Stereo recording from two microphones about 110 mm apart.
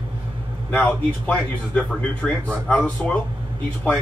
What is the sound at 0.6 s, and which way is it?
Speech, 15° left (ahead or behind).